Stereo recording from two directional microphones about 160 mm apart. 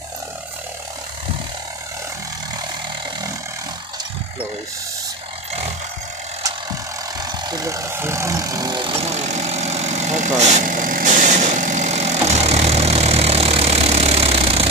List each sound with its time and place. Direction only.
7.2 s vehicle: 25° right (ahead or behind)